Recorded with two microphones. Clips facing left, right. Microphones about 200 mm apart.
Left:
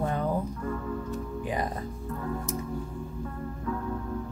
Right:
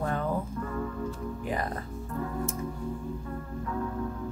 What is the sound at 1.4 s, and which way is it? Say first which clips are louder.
Music: left 1 dB; 15° left (ahead or behind).